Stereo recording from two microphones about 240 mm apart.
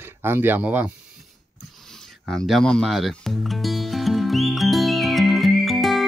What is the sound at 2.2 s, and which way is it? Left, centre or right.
Music, centre.